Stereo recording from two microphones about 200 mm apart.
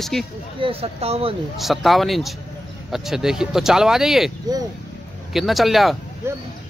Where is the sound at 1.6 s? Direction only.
Centre (ahead or behind).